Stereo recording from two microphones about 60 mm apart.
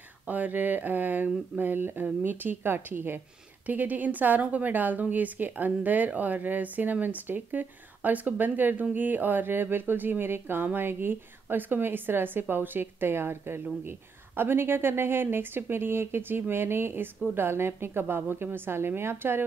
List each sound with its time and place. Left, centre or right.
0.3 s a woman's voice: right